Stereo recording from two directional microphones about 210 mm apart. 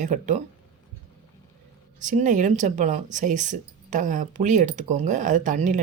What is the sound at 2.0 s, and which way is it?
Speech, 35° right (ahead or behind).